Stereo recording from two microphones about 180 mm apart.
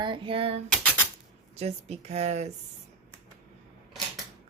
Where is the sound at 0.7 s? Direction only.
5° left (ahead or behind).